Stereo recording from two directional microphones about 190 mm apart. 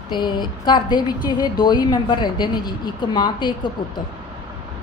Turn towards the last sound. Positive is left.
turn(degrees=25)  # may be behind; listen again after turning